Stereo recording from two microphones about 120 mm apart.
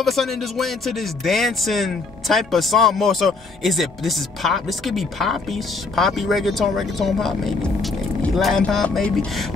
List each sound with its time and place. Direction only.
0.0 s speech: centre (ahead or behind)